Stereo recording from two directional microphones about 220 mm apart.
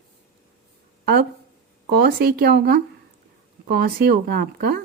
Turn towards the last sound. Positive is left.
turn(degrees=-45)  # may be behind; listen again after turning